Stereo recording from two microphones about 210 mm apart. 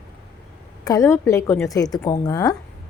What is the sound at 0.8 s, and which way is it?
A woman's voice, 15° left (ahead or behind).